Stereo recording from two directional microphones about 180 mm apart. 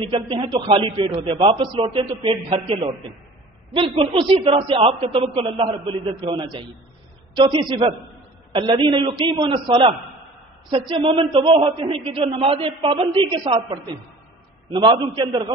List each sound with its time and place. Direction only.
0.0 s a man's voice: 30° right (ahead or behind)